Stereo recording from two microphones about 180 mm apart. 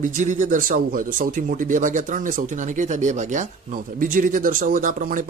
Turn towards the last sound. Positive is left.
turn(degrees=-50)  # may be behind; listen again after turning